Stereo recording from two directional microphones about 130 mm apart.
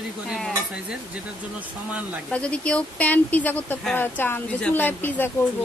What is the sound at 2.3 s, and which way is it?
Speech, 10° left (ahead or behind).